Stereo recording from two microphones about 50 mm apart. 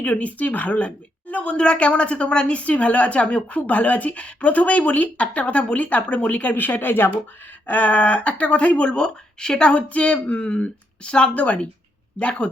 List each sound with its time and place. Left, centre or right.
0.0 s a woman's voice: left
7.7 s a woman's voice: left